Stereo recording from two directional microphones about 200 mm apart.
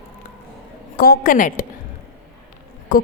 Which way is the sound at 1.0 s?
45° left (ahead or behind).